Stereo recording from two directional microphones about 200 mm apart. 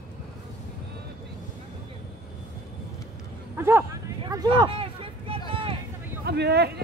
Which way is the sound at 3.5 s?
10° right (ahead or behind).